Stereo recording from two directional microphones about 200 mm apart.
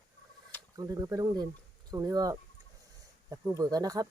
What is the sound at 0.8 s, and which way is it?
Speech, 20° right (ahead or behind).